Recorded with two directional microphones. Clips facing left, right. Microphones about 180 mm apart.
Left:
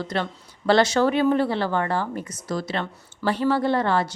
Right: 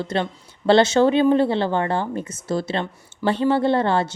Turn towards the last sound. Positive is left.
turn(degrees=-25)  # may be behind; listen again after turning